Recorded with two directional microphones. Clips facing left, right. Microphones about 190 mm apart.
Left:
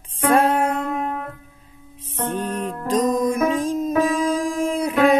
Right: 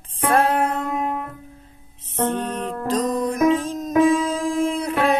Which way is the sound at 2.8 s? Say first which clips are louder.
Left 3 dB; 35° right (ahead or behind).